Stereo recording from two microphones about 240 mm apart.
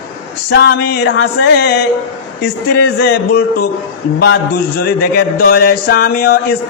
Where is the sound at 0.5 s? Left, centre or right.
Left.